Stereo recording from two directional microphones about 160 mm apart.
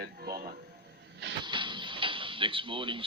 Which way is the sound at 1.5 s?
30° right (ahead or behind).